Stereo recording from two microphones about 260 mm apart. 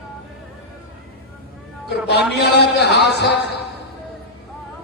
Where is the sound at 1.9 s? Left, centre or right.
Left.